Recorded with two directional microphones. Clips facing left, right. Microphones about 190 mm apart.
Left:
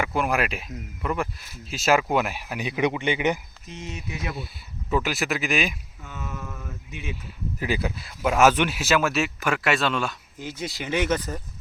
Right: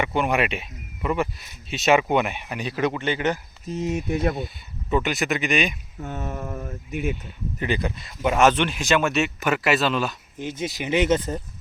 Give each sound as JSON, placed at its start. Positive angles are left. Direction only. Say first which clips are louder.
{"t": 0.0, "sound": "speech", "louder": "right 2 dB", "side_deg": 0}
{"t": 3.7, "sound": "speech", "louder": "right 11 dB", "side_deg": -40}
{"t": 4.9, "sound": "speech", "louder": "right 2 dB", "side_deg": 0}
{"t": 6.1, "sound": "a sound", "louder": "right 5 dB", "side_deg": -55}
{"t": 6.4, "sound": "speech", "louder": "right 6 dB", "side_deg": -40}
{"t": 7.6, "sound": "speech", "louder": "right 1 dB", "side_deg": 5}
{"t": 10.3, "sound": "speech", "louder": "right 4 dB", "side_deg": -20}